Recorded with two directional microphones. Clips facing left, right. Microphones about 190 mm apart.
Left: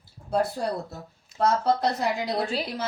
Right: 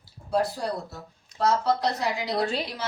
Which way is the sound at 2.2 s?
Centre (ahead or behind).